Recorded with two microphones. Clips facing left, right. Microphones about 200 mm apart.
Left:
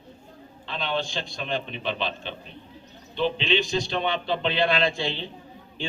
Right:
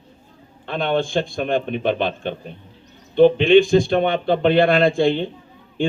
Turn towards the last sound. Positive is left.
turn(degrees=-50)  # may be behind; listen again after turning